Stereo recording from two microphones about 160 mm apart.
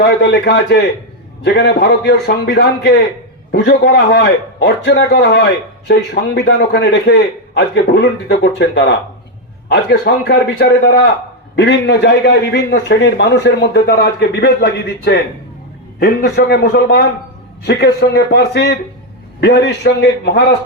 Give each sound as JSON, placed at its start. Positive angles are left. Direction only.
{"t": 0.0, "sound": "a man's voice", "side_deg": 90}
{"t": 17.7, "sound": "a man's voice", "side_deg": 90}